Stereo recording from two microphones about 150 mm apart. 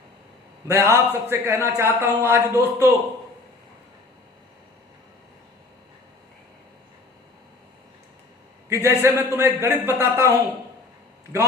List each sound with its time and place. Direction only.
0.7 s a man's voice: 15° right (ahead or behind)
8.7 s a man's voice: 20° right (ahead or behind)